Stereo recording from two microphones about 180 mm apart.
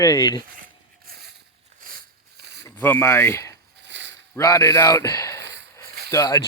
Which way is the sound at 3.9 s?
85° right.